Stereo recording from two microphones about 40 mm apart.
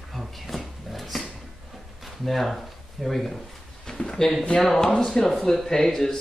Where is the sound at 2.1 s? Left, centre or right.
Centre.